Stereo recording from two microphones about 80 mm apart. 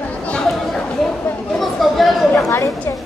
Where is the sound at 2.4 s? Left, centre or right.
Left.